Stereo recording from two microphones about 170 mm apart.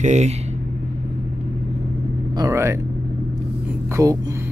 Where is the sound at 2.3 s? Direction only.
20° right (ahead or behind).